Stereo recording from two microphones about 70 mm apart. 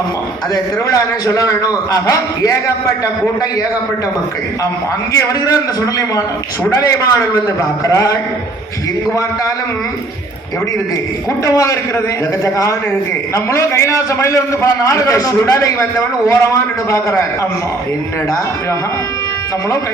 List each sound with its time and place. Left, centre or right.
0.5 s a man's voice: left
5.1 s a man's voice: left
11.4 s a man's voice: left
13.3 s a man's voice: left